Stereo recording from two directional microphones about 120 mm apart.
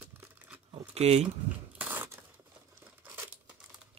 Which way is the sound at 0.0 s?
15° right (ahead or behind).